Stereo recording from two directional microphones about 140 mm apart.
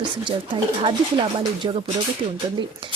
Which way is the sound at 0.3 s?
35° right (ahead or behind).